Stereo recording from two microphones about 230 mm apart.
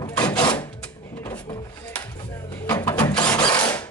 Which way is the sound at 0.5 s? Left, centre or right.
Centre.